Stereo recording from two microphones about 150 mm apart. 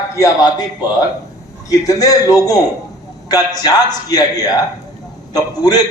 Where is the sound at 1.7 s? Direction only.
25° left (ahead or behind).